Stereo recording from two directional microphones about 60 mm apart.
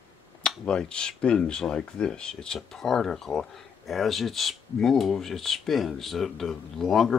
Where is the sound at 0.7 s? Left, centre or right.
Centre.